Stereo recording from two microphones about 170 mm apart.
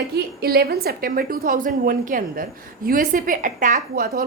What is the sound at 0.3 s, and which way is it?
A woman's voice, 65° right (ahead or behind).